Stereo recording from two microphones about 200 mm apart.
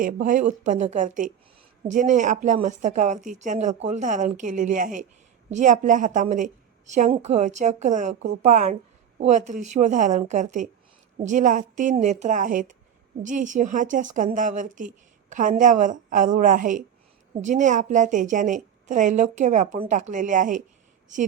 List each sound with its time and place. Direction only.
0.0 s a woman's voice: 40° right (ahead or behind)